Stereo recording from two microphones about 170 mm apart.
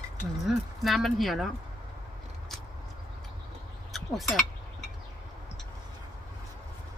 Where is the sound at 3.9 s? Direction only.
Centre (ahead or behind).